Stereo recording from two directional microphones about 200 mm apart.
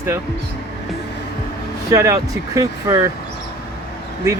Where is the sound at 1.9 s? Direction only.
15° right (ahead or behind).